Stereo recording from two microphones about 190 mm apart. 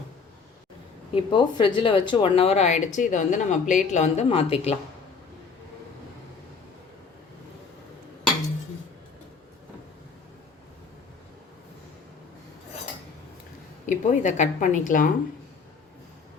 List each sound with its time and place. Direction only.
1.1 s speech: 25° left (ahead or behind)
13.8 s speech: 40° left (ahead or behind)